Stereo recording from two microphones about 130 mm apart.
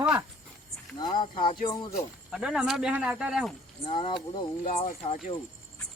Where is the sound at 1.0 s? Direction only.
35° left (ahead or behind).